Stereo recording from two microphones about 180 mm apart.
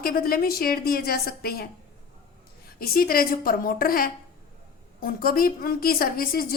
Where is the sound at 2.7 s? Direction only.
55° left (ahead or behind).